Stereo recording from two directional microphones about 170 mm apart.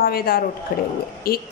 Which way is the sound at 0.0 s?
60° left (ahead or behind).